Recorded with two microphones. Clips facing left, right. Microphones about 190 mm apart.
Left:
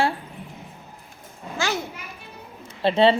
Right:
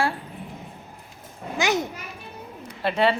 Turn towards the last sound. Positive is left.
turn(degrees=25)  # may be behind; listen again after turning